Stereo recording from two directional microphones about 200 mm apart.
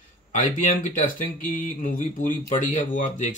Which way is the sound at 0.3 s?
40° left (ahead or behind).